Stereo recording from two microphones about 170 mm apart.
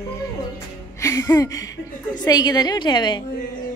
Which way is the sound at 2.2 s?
25° left (ahead or behind).